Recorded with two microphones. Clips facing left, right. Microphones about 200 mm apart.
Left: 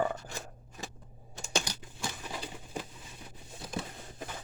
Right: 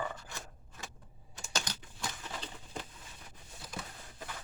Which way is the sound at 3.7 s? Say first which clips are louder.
Left 7 dB; 25° left (ahead or behind).